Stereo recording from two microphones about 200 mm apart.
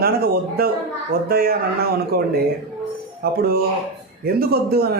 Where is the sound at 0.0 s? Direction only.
50° right (ahead or behind).